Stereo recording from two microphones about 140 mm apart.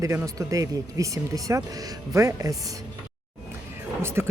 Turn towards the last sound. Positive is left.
turn(degrees=-20)  # may be behind; listen again after turning